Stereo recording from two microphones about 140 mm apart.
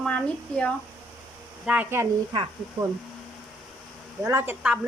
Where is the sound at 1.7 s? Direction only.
15° right (ahead or behind).